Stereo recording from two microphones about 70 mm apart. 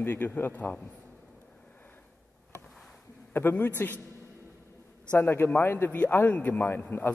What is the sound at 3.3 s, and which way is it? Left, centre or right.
Speech, left.